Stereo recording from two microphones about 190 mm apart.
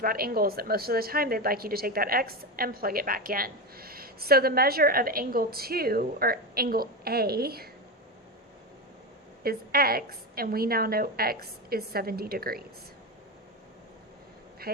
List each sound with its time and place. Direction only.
0.0 s a woman's voice: 50° right (ahead or behind)
9.4 s a woman's voice: 50° right (ahead or behind)
14.6 s speech: 55° right (ahead or behind)